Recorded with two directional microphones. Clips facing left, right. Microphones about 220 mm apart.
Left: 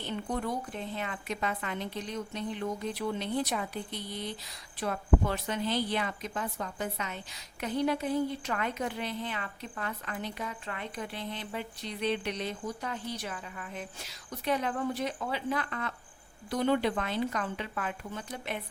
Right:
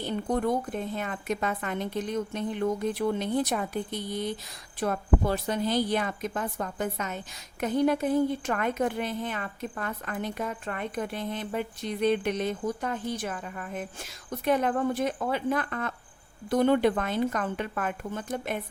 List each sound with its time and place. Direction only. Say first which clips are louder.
0.0 s a woman's voice: right 6 dB; 45° right (ahead or behind)